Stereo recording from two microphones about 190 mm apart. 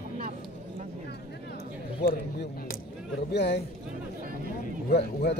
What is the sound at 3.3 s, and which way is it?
Speech, 65° left (ahead or behind).